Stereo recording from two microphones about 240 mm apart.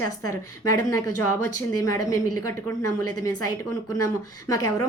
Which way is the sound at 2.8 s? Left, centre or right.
Left.